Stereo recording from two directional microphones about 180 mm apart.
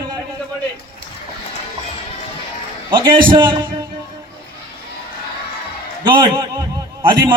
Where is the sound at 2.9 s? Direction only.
25° right (ahead or behind).